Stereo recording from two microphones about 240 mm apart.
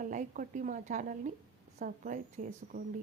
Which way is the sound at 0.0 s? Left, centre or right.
Right.